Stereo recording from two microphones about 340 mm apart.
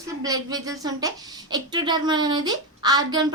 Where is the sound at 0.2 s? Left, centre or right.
Centre.